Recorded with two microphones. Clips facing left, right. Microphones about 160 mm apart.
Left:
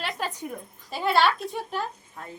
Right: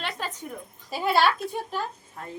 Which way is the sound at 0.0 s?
10° left (ahead or behind).